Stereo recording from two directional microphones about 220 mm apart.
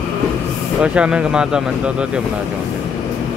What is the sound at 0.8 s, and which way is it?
Speech, 5° right (ahead or behind).